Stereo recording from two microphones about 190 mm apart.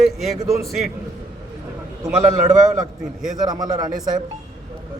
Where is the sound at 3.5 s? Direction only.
20° right (ahead or behind).